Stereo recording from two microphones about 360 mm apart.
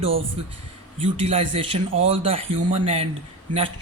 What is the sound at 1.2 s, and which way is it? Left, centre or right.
Speech, centre.